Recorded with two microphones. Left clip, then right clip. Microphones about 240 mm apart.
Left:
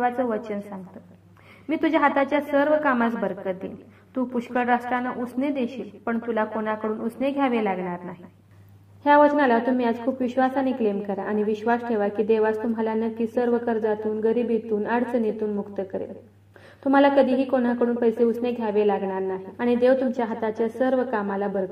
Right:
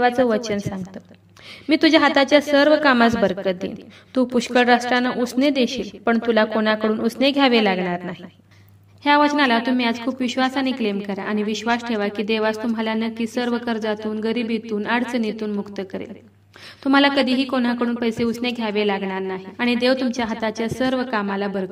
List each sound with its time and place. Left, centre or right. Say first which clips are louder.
0.0 s a woman's voice: right 6 dB; right